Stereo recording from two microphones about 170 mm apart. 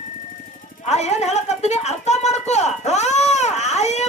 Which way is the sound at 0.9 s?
40° left (ahead or behind).